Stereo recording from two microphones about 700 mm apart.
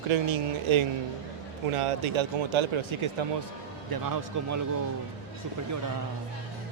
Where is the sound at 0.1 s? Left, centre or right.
Right.